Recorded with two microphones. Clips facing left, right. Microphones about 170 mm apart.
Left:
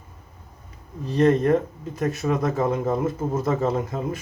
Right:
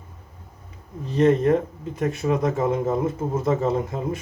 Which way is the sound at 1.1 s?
20° right (ahead or behind).